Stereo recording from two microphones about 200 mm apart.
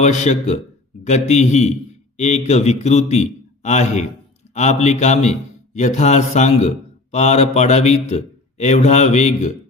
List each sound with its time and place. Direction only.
0.0 s a man's voice: 35° left (ahead or behind)